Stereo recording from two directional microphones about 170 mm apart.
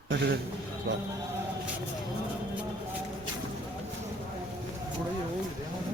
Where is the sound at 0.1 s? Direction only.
85° right.